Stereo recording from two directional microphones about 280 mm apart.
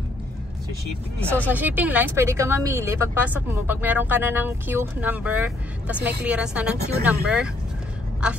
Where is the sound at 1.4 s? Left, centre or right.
Centre.